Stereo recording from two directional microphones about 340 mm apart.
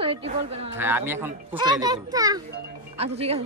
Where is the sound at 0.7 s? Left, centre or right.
Centre.